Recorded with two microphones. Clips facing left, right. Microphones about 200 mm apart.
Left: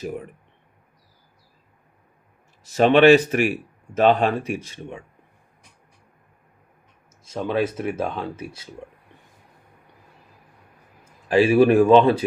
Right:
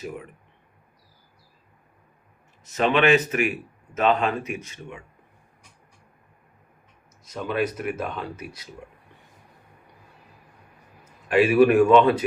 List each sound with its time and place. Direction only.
2.6 s speech: 35° left (ahead or behind)
7.3 s speech: 30° left (ahead or behind)
11.0 s a man's voice: 30° left (ahead or behind)